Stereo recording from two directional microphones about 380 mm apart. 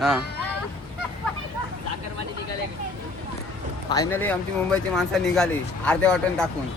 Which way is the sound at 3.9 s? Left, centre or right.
Centre.